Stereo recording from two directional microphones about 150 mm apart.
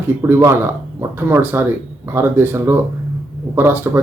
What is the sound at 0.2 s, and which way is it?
Speech, 15° right (ahead or behind).